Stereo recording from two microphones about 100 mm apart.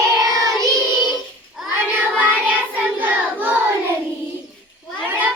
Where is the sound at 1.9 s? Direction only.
15° right (ahead or behind).